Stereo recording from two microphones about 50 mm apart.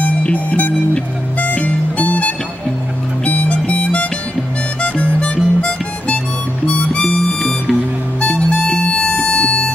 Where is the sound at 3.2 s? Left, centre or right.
Left.